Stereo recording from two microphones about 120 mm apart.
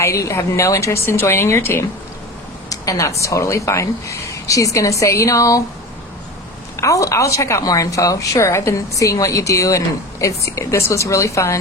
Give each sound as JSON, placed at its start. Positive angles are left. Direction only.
{"t": 0.0, "sound": "a woman's voice", "side_deg": 25}
{"t": 6.7, "sound": "a woman's voice", "side_deg": 25}